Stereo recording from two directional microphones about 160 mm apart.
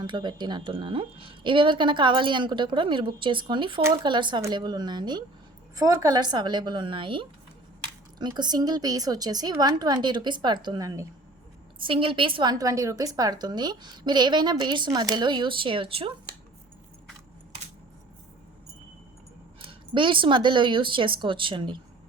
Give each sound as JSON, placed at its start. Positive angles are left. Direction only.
{"t": 0.0, "sound": "a woman's voice", "side_deg": -30}
{"t": 11.9, "sound": "a woman's voice", "side_deg": -35}
{"t": 19.9, "sound": "a woman's voice", "side_deg": -30}